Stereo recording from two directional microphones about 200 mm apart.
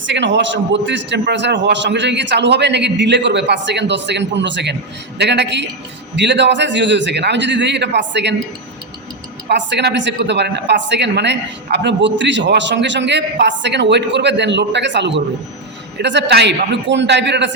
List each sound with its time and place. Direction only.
0.0 s speech: 65° right (ahead or behind)
9.5 s speech: 60° right (ahead or behind)